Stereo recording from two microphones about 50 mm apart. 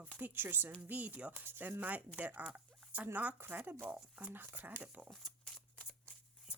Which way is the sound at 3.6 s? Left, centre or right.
Right.